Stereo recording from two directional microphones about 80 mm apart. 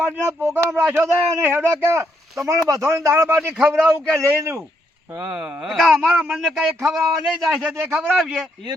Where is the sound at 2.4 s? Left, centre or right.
Right.